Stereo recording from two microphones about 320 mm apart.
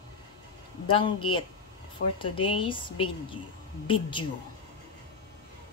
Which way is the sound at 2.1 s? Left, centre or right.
Centre.